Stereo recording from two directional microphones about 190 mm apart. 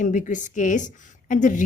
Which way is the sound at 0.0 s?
40° left (ahead or behind).